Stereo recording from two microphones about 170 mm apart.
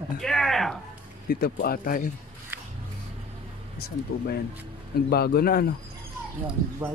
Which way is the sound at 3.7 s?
70° left (ahead or behind).